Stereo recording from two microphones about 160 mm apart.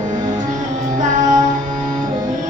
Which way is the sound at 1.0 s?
55° right (ahead or behind).